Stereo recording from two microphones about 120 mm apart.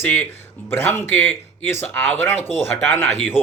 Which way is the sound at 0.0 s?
15° left (ahead or behind).